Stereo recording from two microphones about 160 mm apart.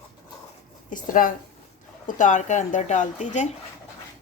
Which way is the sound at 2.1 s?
55° left (ahead or behind).